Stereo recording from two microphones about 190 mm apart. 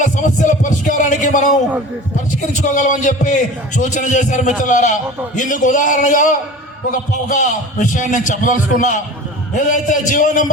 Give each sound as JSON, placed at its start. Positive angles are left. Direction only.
{"t": 0.0, "sound": "a man's voice", "side_deg": 40}